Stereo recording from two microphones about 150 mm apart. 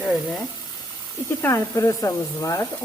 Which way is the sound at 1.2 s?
15° left (ahead or behind).